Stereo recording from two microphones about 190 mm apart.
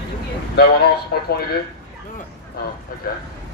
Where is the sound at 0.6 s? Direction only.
55° left (ahead or behind).